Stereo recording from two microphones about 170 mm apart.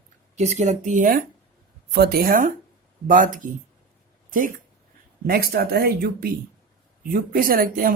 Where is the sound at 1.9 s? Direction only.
65° right (ahead or behind).